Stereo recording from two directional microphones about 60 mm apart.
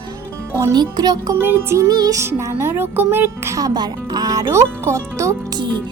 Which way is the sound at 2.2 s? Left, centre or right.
Right.